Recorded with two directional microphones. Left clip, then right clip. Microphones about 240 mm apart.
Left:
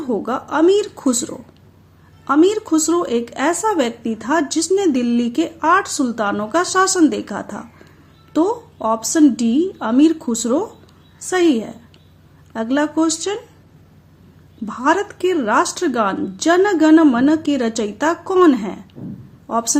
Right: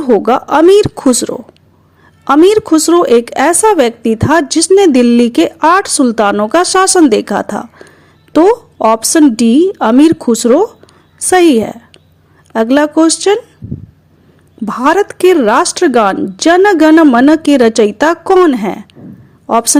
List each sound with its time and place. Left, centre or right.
0.0 s speech: right
14.6 s speech: right